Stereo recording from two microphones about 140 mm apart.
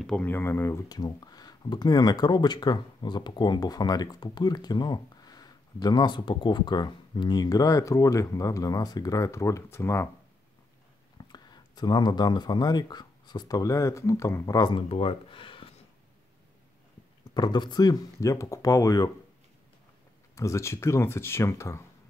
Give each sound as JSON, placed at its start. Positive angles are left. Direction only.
{"t": 0.0, "sound": "speech", "side_deg": 10}
{"t": 11.1, "sound": "speech", "side_deg": 30}
{"t": 17.3, "sound": "speech", "side_deg": 30}
{"t": 20.3, "sound": "speech", "side_deg": 20}